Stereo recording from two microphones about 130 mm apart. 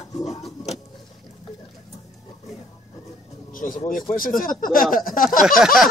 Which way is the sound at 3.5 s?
90° left.